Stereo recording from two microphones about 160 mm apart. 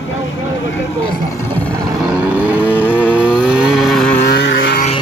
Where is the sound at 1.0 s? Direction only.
10° left (ahead or behind).